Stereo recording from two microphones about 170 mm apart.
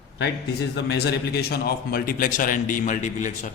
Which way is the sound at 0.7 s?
80° left.